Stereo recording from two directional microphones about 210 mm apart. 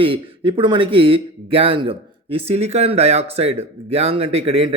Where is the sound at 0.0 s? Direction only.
25° right (ahead or behind).